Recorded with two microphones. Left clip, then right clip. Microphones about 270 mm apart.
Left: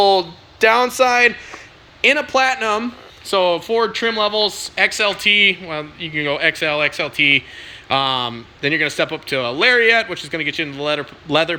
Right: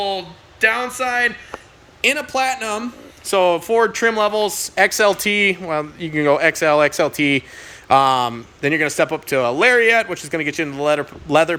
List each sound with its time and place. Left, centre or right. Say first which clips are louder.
0.0 s speech: left 9 dB; centre
2.0 s speech: left 3 dB; centre